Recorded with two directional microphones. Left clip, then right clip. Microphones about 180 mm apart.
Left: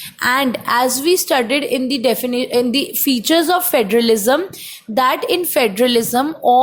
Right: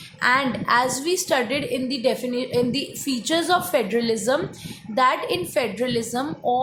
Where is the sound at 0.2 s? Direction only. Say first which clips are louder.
Left 4 dB; 45° left (ahead or behind).